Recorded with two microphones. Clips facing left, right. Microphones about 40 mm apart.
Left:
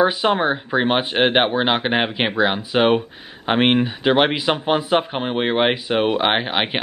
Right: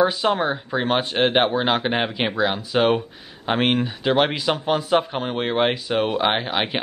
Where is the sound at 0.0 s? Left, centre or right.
Left.